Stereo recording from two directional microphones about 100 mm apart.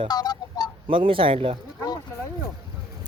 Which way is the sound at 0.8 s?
60° right (ahead or behind).